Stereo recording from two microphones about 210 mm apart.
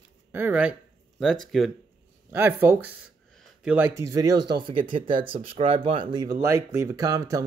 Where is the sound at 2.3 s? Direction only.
10° right (ahead or behind).